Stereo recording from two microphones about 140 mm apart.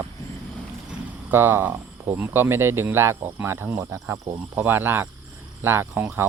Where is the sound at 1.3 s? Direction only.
15° right (ahead or behind).